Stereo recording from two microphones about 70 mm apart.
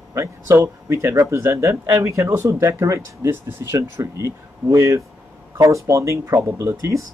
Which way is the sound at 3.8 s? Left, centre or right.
Right.